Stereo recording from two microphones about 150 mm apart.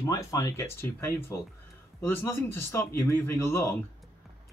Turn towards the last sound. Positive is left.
turn(degrees=15)  # may be behind; listen again after turning